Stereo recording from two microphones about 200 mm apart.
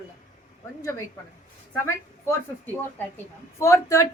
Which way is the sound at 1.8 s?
15° left (ahead or behind).